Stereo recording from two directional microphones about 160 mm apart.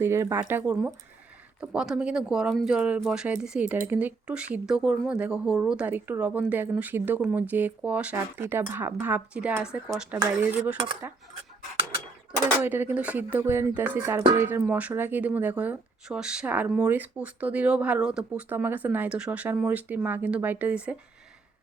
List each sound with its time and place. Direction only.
0.0 s speech: 15° right (ahead or behind)
12.6 s speech: 10° right (ahead or behind)